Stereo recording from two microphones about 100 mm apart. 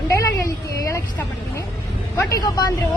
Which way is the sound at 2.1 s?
35° left (ahead or behind).